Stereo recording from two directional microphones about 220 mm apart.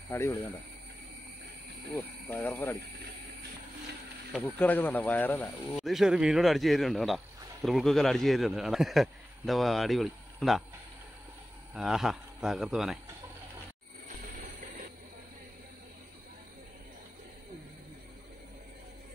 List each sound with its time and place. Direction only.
0.1 s speech: 10° left (ahead or behind)
2.2 s speech: 10° left (ahead or behind)
4.4 s a man's voice: 10° left (ahead or behind)
11.7 s a man's voice: centre (ahead or behind)